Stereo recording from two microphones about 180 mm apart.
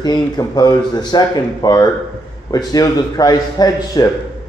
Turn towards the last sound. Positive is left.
turn(degrees=20)  # may be behind; listen again after turning